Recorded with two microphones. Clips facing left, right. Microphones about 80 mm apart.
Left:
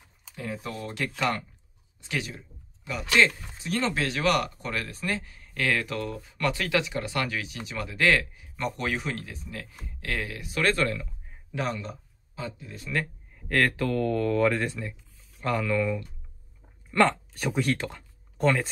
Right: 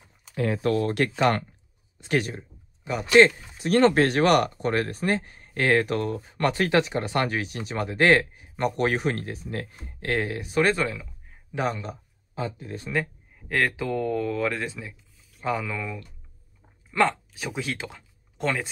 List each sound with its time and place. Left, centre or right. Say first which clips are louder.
0.3 s speech: right 11 dB; right
2.0 s speech: right 7 dB; right
2.8 s speech: right 6 dB; right
3.6 s speech: right 9 dB; right
10.6 s speech: right 2 dB; centre
12.4 s speech: right 5 dB; right
13.5 s speech: even; centre